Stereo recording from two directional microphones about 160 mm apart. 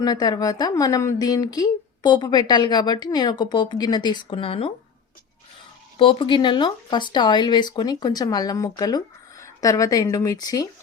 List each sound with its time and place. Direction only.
0.0 s a woman's voice: 25° left (ahead or behind)
6.0 s a woman's voice: 30° left (ahead or behind)